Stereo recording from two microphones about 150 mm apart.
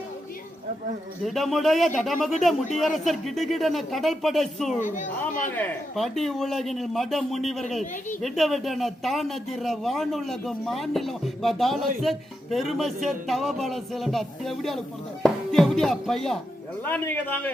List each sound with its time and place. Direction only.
1.2 s speech: centre (ahead or behind)
4.8 s a woman's voice: 60° left (ahead or behind)
5.5 s a man's voice: 10° left (ahead or behind)
16.8 s a man's voice: 15° left (ahead or behind)